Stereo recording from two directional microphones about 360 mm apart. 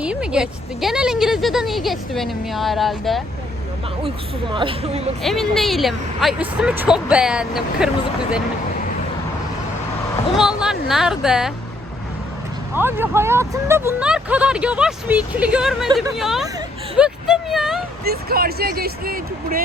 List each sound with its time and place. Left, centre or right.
0.0 s a woman's voice: centre
4.5 s speech: centre
5.2 s a woman's voice: centre
10.3 s a woman's voice: centre
12.7 s a woman's voice: centre
17.0 s a sound: centre
18.0 s speech: right